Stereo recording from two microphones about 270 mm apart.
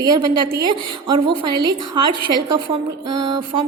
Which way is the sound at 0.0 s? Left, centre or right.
Centre.